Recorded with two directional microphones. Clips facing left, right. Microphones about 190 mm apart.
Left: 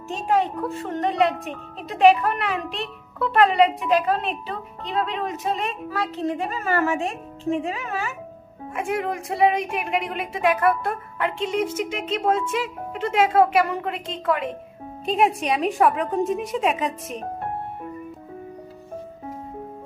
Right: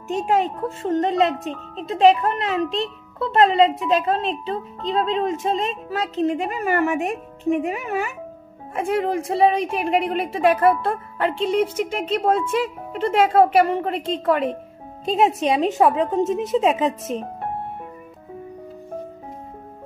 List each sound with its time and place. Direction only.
0.1 s speech: 20° right (ahead or behind)
8.7 s a woman's voice: 30° right (ahead or behind)